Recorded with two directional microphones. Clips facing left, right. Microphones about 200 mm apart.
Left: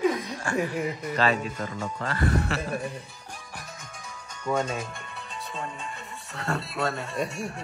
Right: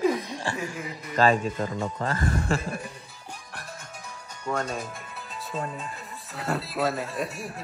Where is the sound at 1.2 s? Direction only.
45° right (ahead or behind).